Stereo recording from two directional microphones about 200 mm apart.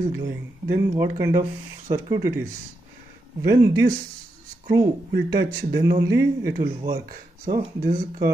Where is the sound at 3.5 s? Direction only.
15° right (ahead or behind).